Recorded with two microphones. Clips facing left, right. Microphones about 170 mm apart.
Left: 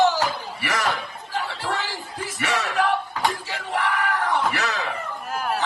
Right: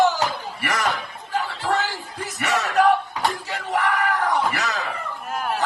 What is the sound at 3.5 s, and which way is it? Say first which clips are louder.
Music: right 2 dB; 45° right (ahead or behind).